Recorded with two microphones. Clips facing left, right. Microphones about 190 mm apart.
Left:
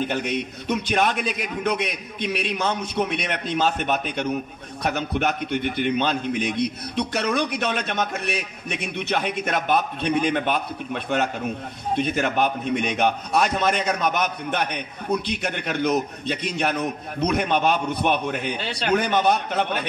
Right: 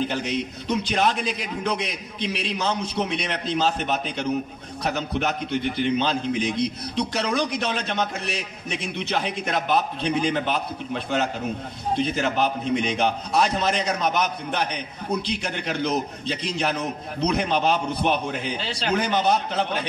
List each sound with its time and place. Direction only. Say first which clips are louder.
0.1 s a man's voice: left 1 dB; 55° left (ahead or behind)